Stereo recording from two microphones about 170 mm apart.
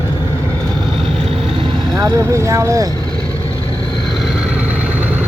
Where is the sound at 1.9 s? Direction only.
15° right (ahead or behind).